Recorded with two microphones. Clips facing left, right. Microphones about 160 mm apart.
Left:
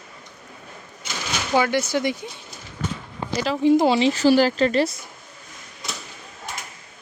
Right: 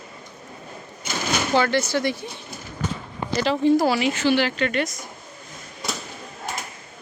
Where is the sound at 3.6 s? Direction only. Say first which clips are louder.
Left 3 dB; 15° left (ahead or behind).